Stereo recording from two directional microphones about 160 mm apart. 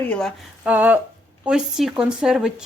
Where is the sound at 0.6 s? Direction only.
10° right (ahead or behind).